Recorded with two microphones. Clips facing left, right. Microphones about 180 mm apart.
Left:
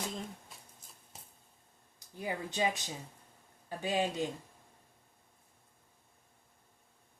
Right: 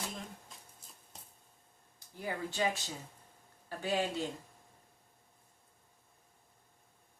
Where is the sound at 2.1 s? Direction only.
20° left (ahead or behind).